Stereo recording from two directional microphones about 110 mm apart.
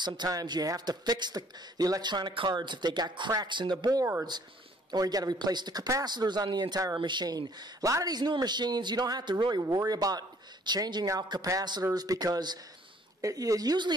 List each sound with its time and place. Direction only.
0.0 s speech: 35° right (ahead or behind)
4.0 s speech: 20° right (ahead or behind)
4.9 s speech: 35° right (ahead or behind)